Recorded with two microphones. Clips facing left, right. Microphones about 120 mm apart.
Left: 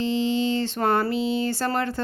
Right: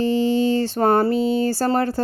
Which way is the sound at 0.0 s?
40° right (ahead or behind).